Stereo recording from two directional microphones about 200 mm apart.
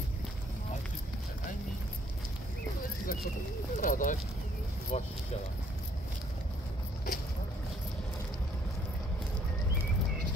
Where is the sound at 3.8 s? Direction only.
40° left (ahead or behind).